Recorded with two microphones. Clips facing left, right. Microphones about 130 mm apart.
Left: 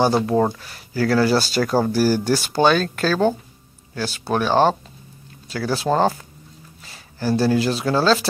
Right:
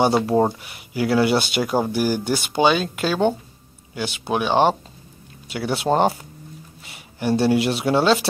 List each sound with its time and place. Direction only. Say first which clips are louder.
0.0 s speech: even; 25° right (ahead or behind)